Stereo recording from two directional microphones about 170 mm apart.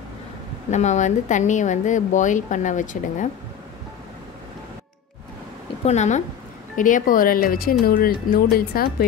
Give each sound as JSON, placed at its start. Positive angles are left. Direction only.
{"t": 0.7, "sound": "a woman's voice", "side_deg": 45}
{"t": 5.9, "sound": "a woman's voice", "side_deg": 45}